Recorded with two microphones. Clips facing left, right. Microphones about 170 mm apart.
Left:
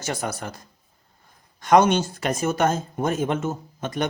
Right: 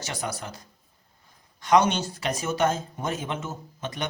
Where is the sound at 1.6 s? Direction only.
50° left (ahead or behind).